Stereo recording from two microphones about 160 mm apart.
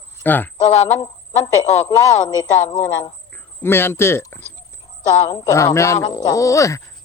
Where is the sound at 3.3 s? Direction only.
15° left (ahead or behind).